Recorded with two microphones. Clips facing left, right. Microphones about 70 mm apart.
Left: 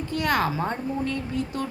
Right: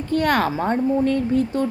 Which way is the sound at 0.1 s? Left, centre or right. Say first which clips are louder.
Right 5 dB; right.